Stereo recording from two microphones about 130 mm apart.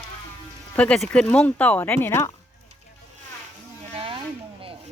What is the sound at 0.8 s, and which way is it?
Speech, 10° left (ahead or behind).